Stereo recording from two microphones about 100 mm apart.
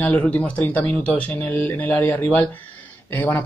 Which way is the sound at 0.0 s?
15° left (ahead or behind).